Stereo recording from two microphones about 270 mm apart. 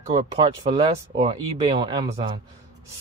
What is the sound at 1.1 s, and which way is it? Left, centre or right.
Speech, centre.